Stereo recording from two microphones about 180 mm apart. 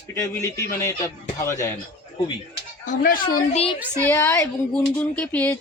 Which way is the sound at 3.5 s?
30° left (ahead or behind).